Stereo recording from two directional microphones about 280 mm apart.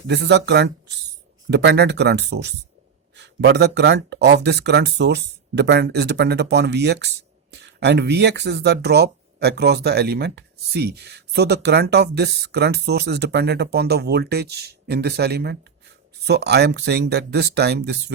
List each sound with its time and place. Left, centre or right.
0.1 s speech: right